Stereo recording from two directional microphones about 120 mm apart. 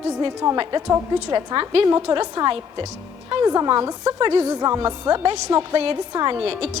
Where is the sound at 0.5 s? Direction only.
45° right (ahead or behind).